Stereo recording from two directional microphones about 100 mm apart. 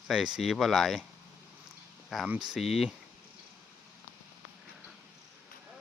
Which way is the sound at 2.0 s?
Centre (ahead or behind).